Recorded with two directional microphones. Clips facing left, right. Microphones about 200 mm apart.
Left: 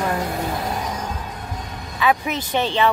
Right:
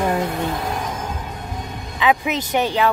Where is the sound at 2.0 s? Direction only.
15° right (ahead or behind).